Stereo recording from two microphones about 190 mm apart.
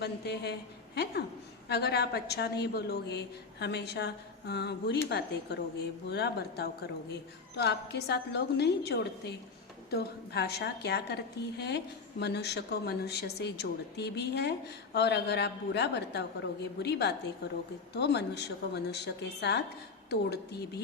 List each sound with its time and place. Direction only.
0.0 s a woman's voice: 60° left (ahead or behind)
1.6 s a woman's voice: 60° left (ahead or behind)